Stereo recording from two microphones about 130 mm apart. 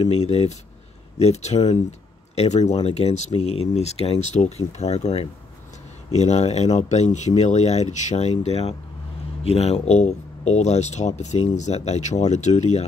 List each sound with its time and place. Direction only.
0.0 s speech: 55° left (ahead or behind)